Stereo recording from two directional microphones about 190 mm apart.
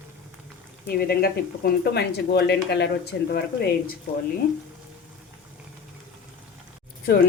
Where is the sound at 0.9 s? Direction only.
55° left (ahead or behind).